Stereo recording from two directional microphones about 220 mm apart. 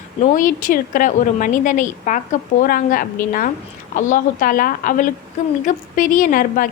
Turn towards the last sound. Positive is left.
turn(degrees=40)  # may be behind; listen again after turning